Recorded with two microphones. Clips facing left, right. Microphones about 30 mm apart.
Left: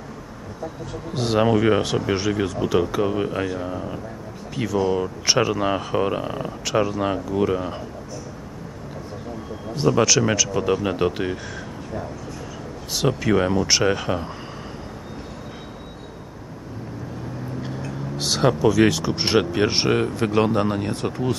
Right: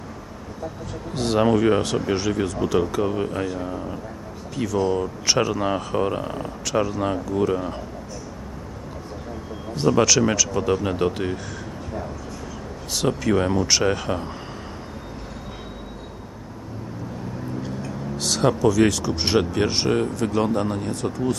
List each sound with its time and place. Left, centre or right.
1.1 s speech: centre
9.8 s speech: centre
12.9 s speech: centre
17.6 s a sound: centre
18.6 s speech: centre